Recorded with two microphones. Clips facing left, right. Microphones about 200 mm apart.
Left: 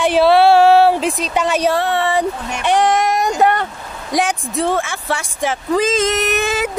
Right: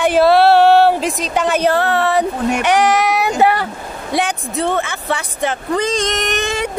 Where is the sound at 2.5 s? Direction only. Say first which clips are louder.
Even; 70° right (ahead or behind).